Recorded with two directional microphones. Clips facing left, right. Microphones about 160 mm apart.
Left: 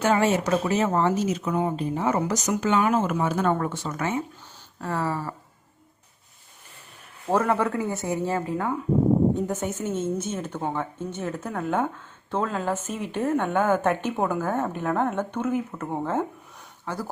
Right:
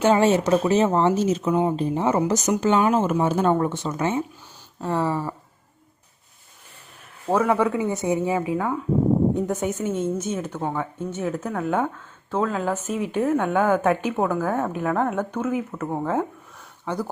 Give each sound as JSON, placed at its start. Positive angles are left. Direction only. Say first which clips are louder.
{"t": 0.0, "sound": "speech", "louder": "right 4 dB", "side_deg": -25}
{"t": 7.3, "sound": "a woman's voice", "louder": "right 3 dB", "side_deg": -10}
{"t": 8.4, "sound": "a woman's voice", "louder": "right 3 dB", "side_deg": -5}
{"t": 16.8, "sound": "speech", "louder": "right 4 dB", "side_deg": -15}